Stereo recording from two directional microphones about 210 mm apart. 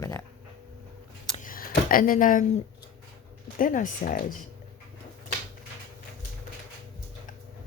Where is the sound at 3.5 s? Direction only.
40° left (ahead or behind).